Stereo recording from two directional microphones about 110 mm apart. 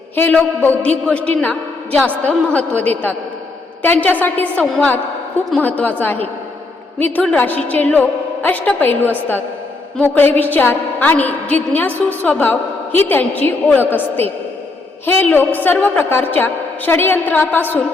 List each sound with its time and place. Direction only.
0.2 s a man's voice: 15° left (ahead or behind)
5.6 s a man's voice: 15° left (ahead or behind)